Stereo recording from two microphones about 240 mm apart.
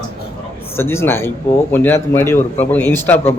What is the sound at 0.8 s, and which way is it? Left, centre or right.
A man's voice, centre.